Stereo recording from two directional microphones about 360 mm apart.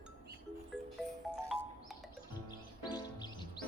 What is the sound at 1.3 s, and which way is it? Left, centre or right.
Music, centre.